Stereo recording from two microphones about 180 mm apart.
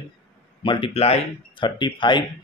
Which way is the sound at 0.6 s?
30° left (ahead or behind).